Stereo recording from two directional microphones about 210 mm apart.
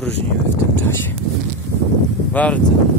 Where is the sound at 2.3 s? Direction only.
5° left (ahead or behind).